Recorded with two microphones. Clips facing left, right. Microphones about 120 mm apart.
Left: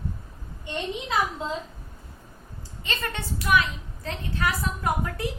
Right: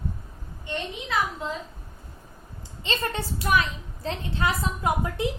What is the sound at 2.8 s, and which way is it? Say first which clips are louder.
A woman's voice: right 3 dB; 30° right (ahead or behind).